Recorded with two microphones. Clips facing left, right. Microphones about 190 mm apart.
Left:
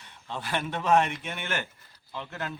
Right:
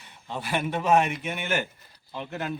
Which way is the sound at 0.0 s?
10° right (ahead or behind).